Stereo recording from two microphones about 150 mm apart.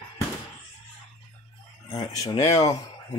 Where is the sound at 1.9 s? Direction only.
25° left (ahead or behind).